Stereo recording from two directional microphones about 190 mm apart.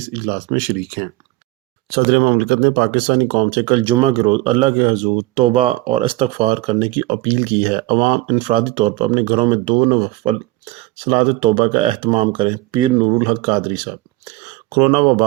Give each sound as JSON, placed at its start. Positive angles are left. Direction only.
{"t": 0.1, "sound": "speech", "side_deg": -30}
{"t": 2.0, "sound": "speech", "side_deg": -30}